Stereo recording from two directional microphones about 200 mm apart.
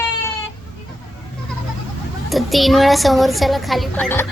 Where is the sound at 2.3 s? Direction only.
Centre (ahead or behind).